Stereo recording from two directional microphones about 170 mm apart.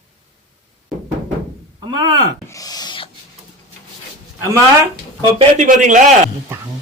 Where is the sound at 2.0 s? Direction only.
25° right (ahead or behind).